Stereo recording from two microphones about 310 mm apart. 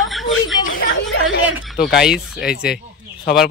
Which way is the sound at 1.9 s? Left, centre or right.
Centre.